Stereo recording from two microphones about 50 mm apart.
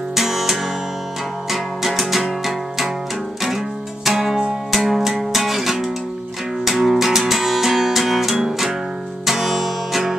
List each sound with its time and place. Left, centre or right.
0.1 s music: centre